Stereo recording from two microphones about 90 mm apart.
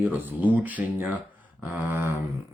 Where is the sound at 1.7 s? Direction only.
25° right (ahead or behind).